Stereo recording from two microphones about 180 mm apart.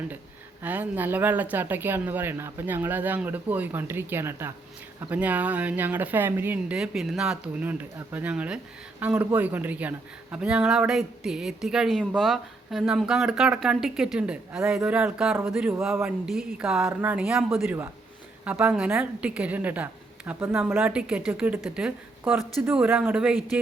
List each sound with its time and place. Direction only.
0.6 s a woman's voice: 10° right (ahead or behind)
16.2 s a woman's voice: centre (ahead or behind)